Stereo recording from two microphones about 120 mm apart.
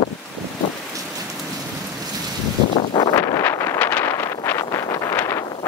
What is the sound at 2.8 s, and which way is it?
Wind, 40° left (ahead or behind).